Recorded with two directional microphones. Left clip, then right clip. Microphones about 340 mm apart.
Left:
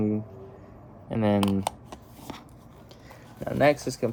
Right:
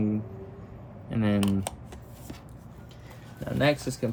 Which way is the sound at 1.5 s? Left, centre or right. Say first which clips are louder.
Left 4 dB; centre.